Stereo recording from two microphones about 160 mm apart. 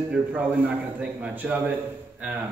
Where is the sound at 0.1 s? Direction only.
10° right (ahead or behind).